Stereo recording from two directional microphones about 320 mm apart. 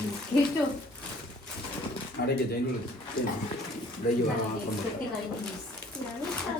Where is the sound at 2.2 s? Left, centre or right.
Left.